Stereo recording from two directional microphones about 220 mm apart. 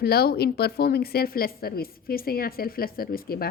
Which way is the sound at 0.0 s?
45° left (ahead or behind).